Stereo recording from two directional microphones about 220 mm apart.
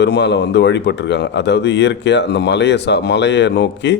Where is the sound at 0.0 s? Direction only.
50° left (ahead or behind).